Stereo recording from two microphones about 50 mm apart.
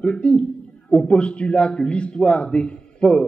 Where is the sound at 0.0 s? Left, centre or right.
Left.